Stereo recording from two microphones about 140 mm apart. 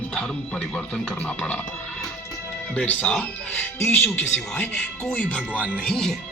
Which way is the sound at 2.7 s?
10° left (ahead or behind).